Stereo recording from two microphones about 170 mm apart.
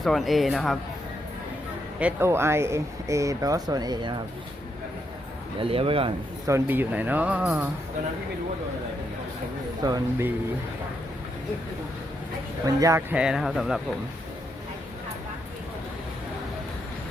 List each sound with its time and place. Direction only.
0.0 s speech: centre (ahead or behind)
2.0 s speech: 10° right (ahead or behind)
5.5 s speech: 35° right (ahead or behind)
6.4 s speech: 15° right (ahead or behind)
9.8 s speech: 20° right (ahead or behind)
12.6 s speech: 20° right (ahead or behind)
13.1 s speech: 5° right (ahead or behind)